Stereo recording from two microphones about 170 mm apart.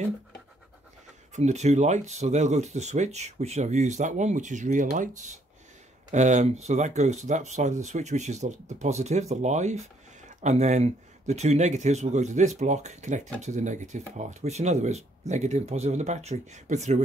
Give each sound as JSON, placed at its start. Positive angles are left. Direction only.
{"t": 1.3, "sound": "speech", "side_deg": -40}